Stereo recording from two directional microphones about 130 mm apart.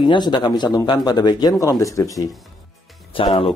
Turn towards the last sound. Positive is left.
turn(degrees=45)  # may be behind; listen again after turning